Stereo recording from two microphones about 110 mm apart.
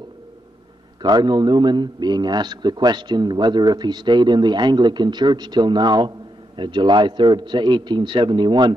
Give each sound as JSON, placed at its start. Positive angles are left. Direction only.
{"t": 1.0, "sound": "a man's voice", "side_deg": -40}